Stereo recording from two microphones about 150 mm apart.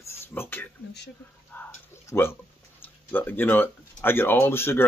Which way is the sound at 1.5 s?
15° left (ahead or behind).